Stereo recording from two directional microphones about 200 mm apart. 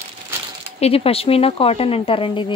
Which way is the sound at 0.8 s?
30° left (ahead or behind).